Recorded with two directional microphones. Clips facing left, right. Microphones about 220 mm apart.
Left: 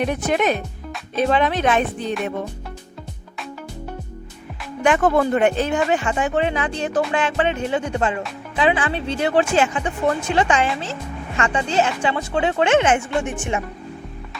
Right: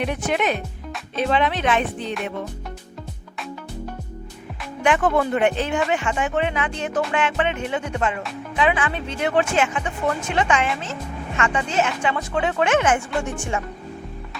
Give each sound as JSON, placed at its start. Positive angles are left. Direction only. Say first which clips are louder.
{"t": 0.0, "sound": "speech", "louder": "left 3 dB", "side_deg": 40}
{"t": 4.8, "sound": "speech", "louder": "left 2 dB", "side_deg": 40}